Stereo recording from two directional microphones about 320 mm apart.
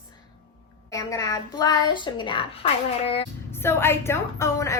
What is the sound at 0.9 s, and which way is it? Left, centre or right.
A woman's voice, centre.